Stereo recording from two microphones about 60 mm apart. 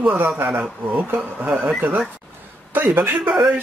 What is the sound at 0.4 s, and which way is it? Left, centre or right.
Speech, right.